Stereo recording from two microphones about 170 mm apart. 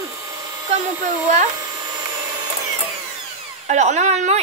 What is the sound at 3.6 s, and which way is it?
Speech, 45° right (ahead or behind).